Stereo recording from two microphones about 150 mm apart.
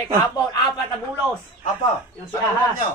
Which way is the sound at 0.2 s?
25° left (ahead or behind).